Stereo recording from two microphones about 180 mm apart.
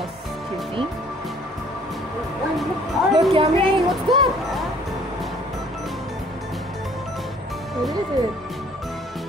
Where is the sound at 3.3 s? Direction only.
30° right (ahead or behind).